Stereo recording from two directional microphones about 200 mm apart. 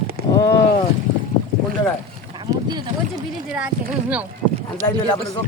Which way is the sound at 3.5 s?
5° right (ahead or behind).